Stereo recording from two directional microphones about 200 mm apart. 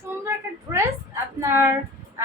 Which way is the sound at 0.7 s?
15° right (ahead or behind).